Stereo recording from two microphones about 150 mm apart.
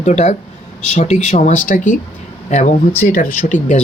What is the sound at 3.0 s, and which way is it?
Speech, 75° left (ahead or behind).